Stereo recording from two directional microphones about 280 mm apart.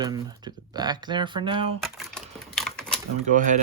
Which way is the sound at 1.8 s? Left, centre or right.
Centre.